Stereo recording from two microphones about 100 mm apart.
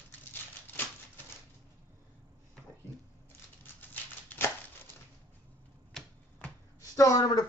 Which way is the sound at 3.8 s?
20° left (ahead or behind).